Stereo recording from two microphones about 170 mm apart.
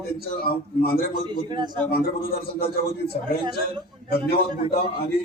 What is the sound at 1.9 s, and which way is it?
Speech, 60° left (ahead or behind).